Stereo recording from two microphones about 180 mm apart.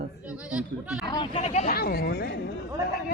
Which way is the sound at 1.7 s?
55° left (ahead or behind).